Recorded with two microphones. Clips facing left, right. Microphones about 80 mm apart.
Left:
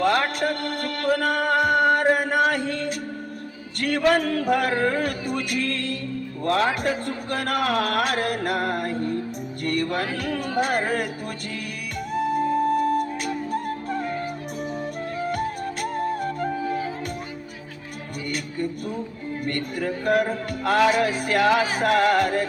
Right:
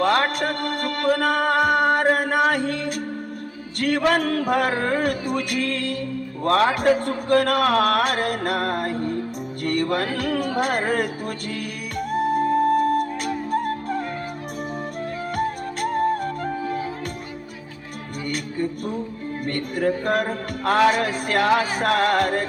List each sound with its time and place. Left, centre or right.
0.0 s music: right
2.1 s mantra: right
3.8 s music: right
6.4 s music: right
9.6 s speech: right
11.9 s music: right
15.3 s music: right
19.7 s music: right